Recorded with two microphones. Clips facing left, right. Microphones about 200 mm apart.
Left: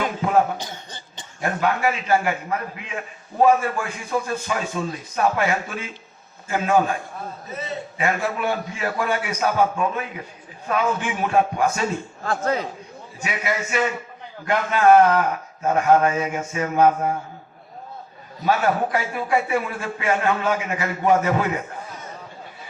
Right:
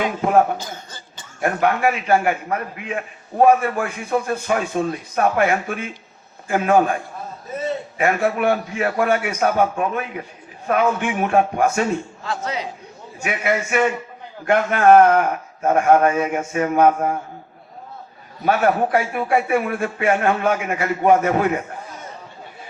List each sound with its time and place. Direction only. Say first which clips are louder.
1.4 s a man's voice: right 3 dB; 55° right (ahead or behind)
7.9 s a man's voice: right 4 dB; 55° right (ahead or behind)
12.2 s a man's voice: left 3 dB; 50° left (ahead or behind)
13.2 s a man's voice: right 4 dB; 55° right (ahead or behind)
18.4 s speech: right 3 dB; 55° right (ahead or behind)